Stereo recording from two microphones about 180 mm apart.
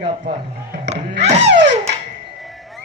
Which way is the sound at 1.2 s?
35° right (ahead or behind).